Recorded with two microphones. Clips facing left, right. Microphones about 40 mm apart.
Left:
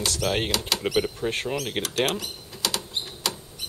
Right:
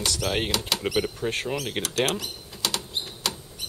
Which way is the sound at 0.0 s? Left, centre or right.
Centre.